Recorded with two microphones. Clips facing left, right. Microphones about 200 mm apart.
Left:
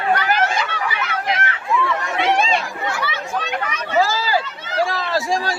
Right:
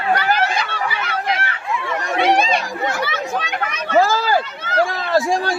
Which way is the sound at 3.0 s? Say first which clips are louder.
Right 3 dB; 45° right (ahead or behind).